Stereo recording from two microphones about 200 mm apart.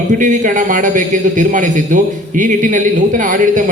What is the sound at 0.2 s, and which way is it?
A man's voice, 40° right (ahead or behind).